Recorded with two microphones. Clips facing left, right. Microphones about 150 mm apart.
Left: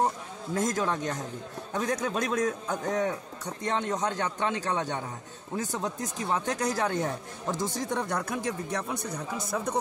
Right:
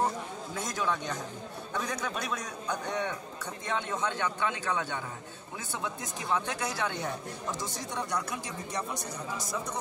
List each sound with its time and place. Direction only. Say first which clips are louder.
0.6 s speech: left 5 dB; 45° left (ahead or behind)